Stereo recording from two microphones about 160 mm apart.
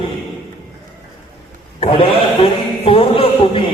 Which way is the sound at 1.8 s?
35° left (ahead or behind).